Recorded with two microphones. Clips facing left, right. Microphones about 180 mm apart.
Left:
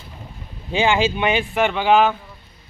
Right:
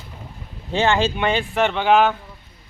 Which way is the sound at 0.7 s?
10° left (ahead or behind).